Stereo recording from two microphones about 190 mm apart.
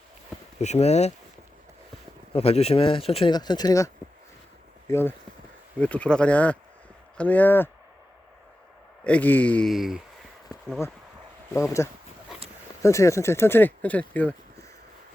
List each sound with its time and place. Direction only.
0.6 s speech: 35° left (ahead or behind)
2.3 s speech: 30° left (ahead or behind); by 7.7 s 10° left (ahead or behind)
9.0 s speech: 10° left (ahead or behind)
11.5 s speech: 15° left (ahead or behind)